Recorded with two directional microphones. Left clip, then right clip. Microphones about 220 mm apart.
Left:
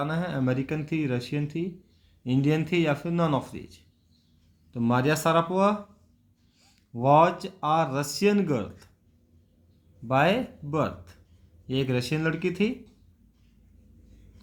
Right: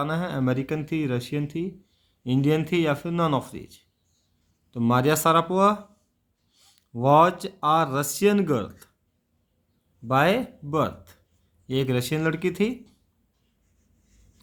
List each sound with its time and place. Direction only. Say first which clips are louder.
0.0 s speech: right 2 dB; 25° right (ahead or behind)
10.1 s speech: right 2 dB; 30° right (ahead or behind)